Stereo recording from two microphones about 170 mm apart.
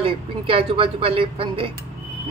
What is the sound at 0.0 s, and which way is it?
A woman's voice, 35° right (ahead or behind).